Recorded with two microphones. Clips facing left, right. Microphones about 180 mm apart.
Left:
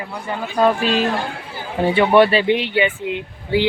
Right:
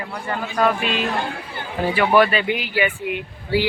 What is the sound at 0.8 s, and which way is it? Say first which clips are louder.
Speech: left 4 dB; 40° left (ahead or behind).